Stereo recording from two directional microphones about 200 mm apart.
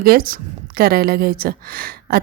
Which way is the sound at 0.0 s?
45° right (ahead or behind).